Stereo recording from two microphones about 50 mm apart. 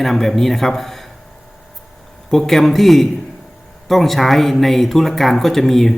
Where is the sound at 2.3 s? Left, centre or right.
Centre.